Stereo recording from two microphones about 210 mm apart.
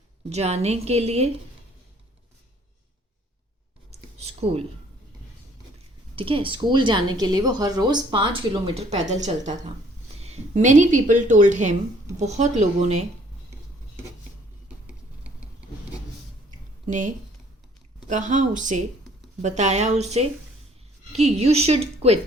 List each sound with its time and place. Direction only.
0.3 s speech: 30° right (ahead or behind)
4.2 s a sound: 30° right (ahead or behind)
6.1 s speech: 25° right (ahead or behind)
16.8 s speech: 35° right (ahead or behind)